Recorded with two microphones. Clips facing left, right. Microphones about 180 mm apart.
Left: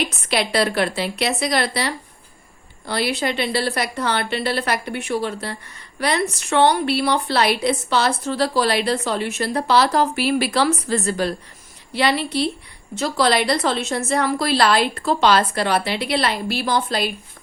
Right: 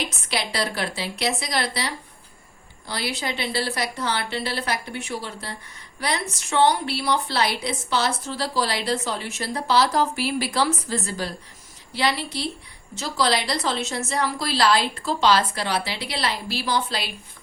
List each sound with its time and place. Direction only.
0.3 s a woman's voice: 60° left (ahead or behind)